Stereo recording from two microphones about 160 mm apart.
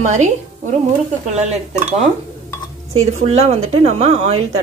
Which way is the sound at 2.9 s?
40° right (ahead or behind).